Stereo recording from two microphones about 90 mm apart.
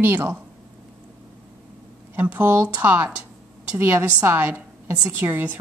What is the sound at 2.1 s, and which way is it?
A woman's voice, 20° right (ahead or behind).